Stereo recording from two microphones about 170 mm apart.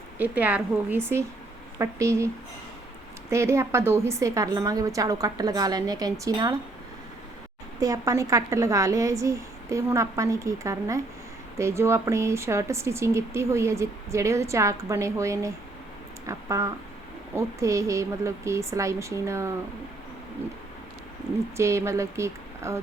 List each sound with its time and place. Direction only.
0.2 s a woman's voice: 10° right (ahead or behind)
7.8 s speech: 20° right (ahead or behind)
21.5 s speech: 15° right (ahead or behind)